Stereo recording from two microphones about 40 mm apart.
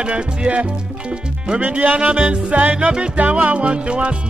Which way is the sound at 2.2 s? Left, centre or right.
Right.